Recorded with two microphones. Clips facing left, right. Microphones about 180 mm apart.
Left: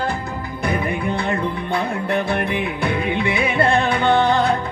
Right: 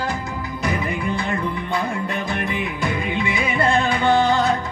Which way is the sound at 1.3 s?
60° left (ahead or behind).